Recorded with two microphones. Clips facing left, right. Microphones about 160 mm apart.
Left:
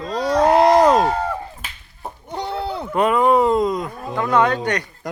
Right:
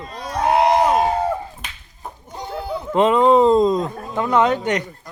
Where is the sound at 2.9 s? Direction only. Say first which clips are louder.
Right 2 dB; 20° right (ahead or behind).